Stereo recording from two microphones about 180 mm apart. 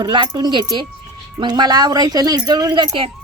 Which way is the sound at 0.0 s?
25° right (ahead or behind).